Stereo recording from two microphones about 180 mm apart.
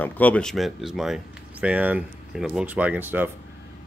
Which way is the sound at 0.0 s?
10° left (ahead or behind).